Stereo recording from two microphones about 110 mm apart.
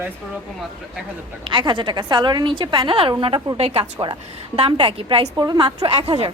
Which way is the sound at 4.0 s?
50° right (ahead or behind).